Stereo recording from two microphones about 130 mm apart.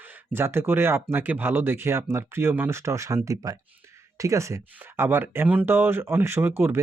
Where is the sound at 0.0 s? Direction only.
20° right (ahead or behind).